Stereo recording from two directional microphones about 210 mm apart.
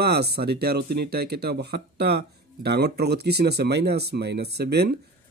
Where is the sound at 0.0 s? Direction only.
50° right (ahead or behind).